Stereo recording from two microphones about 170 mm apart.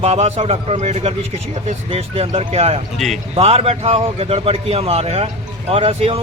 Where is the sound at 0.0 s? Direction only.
40° right (ahead or behind).